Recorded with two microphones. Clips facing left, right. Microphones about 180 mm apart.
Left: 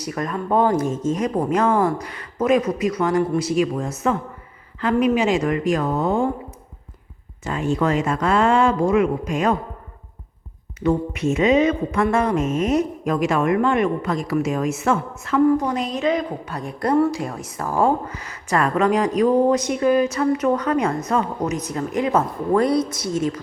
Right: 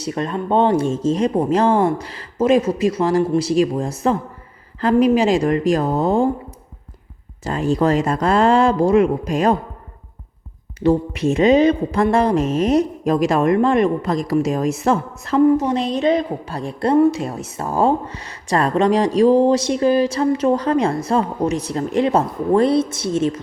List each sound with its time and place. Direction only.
0.0 s a woman's voice: 25° right (ahead or behind)
7.4 s speech: 35° right (ahead or behind)
10.8 s speech: 35° right (ahead or behind)
15.4 s a woman's voice: 20° right (ahead or behind)